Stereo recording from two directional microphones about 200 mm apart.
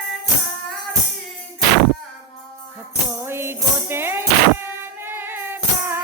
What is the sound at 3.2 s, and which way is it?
Music, 10° right (ahead or behind).